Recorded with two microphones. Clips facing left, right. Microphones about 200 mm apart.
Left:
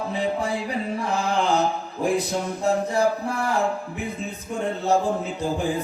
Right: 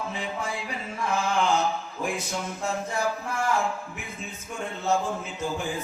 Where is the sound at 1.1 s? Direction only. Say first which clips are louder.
Left 2 dB; 35° left (ahead or behind).